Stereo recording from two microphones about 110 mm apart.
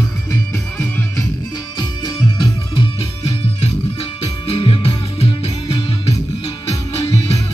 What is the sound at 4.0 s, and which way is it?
Music, 60° left (ahead or behind).